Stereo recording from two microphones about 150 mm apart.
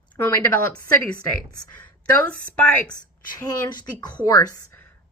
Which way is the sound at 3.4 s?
25° left (ahead or behind).